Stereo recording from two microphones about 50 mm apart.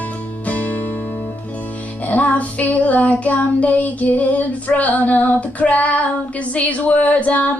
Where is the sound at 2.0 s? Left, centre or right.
Left.